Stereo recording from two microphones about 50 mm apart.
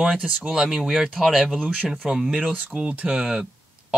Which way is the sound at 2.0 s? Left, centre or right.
Centre.